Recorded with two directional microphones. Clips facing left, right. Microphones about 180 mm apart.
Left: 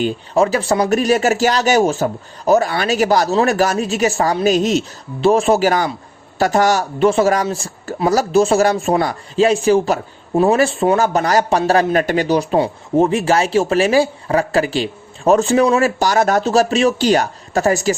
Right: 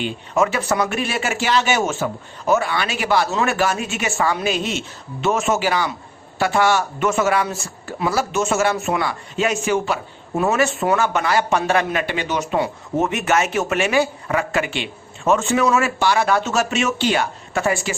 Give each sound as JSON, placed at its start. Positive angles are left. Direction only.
{"t": 0.0, "sound": "speech", "side_deg": 35}